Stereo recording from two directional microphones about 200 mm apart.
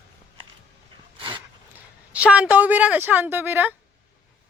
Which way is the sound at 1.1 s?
25° right (ahead or behind).